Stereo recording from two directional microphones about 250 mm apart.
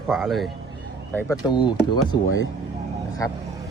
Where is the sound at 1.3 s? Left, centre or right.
Centre.